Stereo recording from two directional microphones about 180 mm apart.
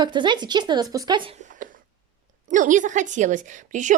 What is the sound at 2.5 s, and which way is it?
A woman's voice, 45° right (ahead or behind).